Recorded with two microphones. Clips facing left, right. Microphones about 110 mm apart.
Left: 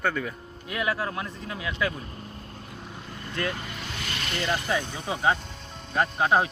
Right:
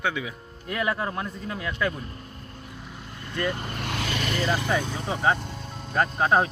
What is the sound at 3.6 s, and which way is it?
Vehicle, 55° right (ahead or behind).